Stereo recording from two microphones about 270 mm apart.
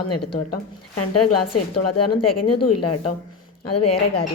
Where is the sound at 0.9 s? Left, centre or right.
Left.